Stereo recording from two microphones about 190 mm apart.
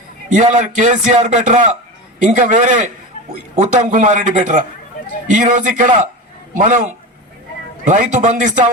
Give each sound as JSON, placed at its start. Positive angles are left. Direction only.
{"t": 0.3, "sound": "a man's voice", "side_deg": -40}
{"t": 7.9, "sound": "speech", "side_deg": -40}